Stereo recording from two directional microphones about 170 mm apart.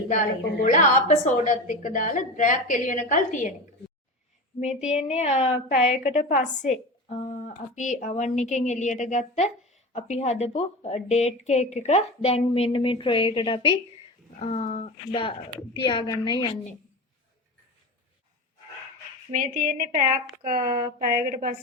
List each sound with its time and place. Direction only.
0.1 s speech: 50° left (ahead or behind)
4.6 s speech: 40° left (ahead or behind)
6.0 s a woman's voice: 50° left (ahead or behind); by 16.5 s 25° left (ahead or behind)
19.3 s a woman's voice: 55° right (ahead or behind)